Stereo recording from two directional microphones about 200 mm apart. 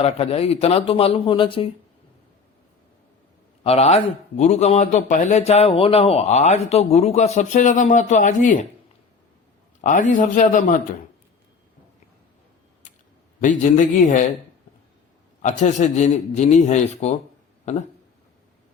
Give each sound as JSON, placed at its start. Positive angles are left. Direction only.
{"t": 0.0, "sound": "speech", "side_deg": 30}
{"t": 3.6, "sound": "a man's voice", "side_deg": 30}
{"t": 9.8, "sound": "a man's voice", "side_deg": 40}
{"t": 13.4, "sound": "a man's voice", "side_deg": 40}
{"t": 15.4, "sound": "a man's voice", "side_deg": 35}